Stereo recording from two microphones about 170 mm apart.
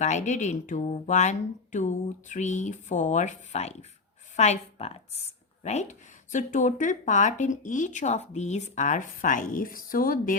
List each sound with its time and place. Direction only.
0.0 s a woman's voice: 45° left (ahead or behind)